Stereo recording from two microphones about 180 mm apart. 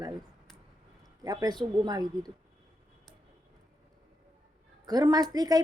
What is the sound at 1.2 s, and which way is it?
A woman's voice, 20° right (ahead or behind).